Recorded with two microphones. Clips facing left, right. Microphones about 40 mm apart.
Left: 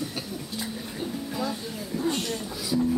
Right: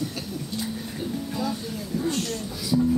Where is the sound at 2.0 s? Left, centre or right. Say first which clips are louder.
Even; left.